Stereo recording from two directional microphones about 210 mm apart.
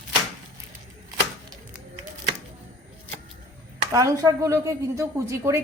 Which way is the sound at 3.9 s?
15° right (ahead or behind).